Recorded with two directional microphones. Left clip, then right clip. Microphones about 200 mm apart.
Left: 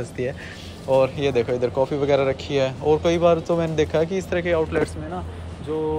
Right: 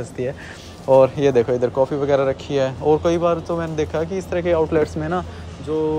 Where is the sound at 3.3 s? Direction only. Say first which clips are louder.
Left 2 dB; centre (ahead or behind).